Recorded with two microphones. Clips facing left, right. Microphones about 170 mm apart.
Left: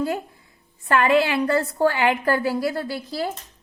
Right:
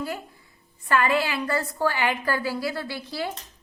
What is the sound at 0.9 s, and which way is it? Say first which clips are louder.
A woman's voice: left 4 dB; 55° left (ahead or behind).